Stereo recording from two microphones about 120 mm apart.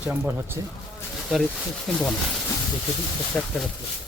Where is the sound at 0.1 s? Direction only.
20° right (ahead or behind).